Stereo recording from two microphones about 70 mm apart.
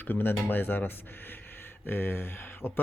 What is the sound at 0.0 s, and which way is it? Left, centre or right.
Speech, left.